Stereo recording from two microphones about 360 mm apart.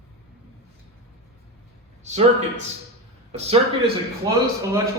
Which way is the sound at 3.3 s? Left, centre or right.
Centre.